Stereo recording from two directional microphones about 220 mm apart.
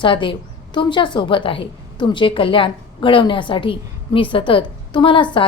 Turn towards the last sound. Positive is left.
turn(degrees=20)  # may be behind; listen again after turning